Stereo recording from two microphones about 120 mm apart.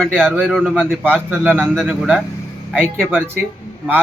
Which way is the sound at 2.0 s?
5° right (ahead or behind).